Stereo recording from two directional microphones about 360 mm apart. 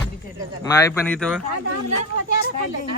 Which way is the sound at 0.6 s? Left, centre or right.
Centre.